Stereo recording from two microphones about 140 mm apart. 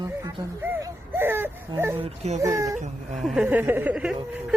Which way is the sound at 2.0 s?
50° right (ahead or behind).